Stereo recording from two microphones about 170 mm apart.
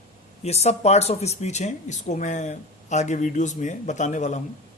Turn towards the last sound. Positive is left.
turn(degrees=45)  # may be behind; listen again after turning